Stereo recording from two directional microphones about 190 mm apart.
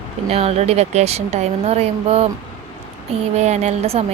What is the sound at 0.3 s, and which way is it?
Speech, 35° right (ahead or behind).